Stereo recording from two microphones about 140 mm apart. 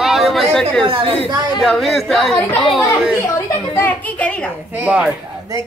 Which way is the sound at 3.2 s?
20° left (ahead or behind).